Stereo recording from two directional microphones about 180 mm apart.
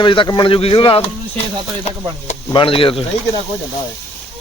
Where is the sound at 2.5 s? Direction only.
30° left (ahead or behind).